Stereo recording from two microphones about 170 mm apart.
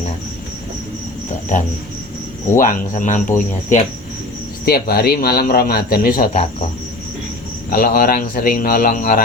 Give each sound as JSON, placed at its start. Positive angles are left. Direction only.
{"t": 2.6, "sound": "speech", "side_deg": 50}
{"t": 4.6, "sound": "a man's voice", "side_deg": 65}
{"t": 7.7, "sound": "a man's voice", "side_deg": 60}